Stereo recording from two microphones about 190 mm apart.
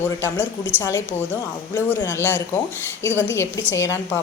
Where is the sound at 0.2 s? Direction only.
15° left (ahead or behind).